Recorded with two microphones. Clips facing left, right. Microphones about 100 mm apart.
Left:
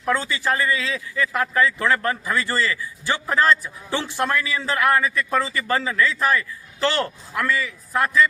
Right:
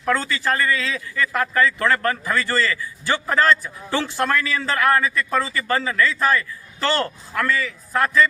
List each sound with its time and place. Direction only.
0.0 s a man's voice: 15° left (ahead or behind)